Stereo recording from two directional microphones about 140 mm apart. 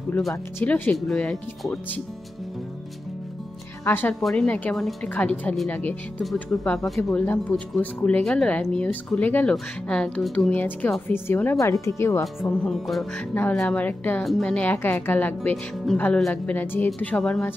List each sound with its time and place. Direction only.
0.6 s speech: 15° left (ahead or behind)
3.8 s speech: 15° left (ahead or behind)
4.1 s speech: 5° left (ahead or behind)
6.8 s speech: 20° left (ahead or behind)
7.2 s speech: 10° left (ahead or behind)
12.4 s speech: 5° left (ahead or behind)